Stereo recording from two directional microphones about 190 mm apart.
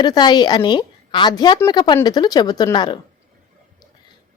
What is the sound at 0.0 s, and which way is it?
A woman's voice, 20° left (ahead or behind).